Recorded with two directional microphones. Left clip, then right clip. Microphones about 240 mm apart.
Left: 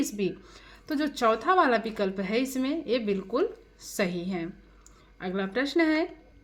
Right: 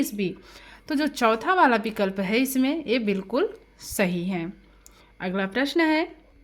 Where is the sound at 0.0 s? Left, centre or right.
Right.